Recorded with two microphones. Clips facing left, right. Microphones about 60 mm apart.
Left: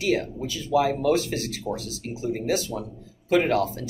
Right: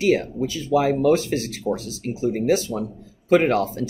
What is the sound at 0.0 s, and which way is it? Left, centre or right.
Speech, right.